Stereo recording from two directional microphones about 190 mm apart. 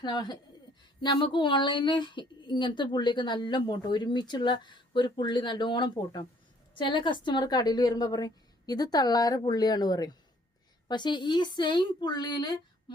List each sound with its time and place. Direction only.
0.0 s a woman's voice: 20° left (ahead or behind)